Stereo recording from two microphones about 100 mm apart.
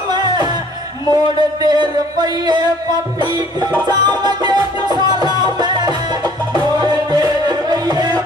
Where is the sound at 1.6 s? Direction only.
45° right (ahead or behind).